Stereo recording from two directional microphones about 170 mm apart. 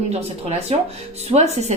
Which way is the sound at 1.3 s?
40° right (ahead or behind).